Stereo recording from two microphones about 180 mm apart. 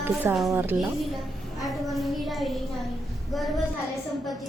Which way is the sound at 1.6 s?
Centre (ahead or behind).